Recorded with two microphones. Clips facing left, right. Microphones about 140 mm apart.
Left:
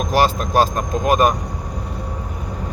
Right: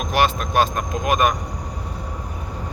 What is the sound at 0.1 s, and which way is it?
Speech, 35° left (ahead or behind).